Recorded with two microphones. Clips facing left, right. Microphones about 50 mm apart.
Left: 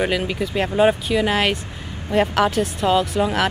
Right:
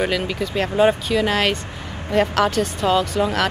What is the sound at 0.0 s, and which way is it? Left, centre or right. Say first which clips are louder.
Speech: even; centre.